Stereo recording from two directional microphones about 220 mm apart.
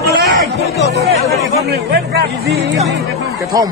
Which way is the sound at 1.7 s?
50° right (ahead or behind).